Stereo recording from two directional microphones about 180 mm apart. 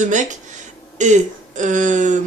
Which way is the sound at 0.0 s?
45° right (ahead or behind).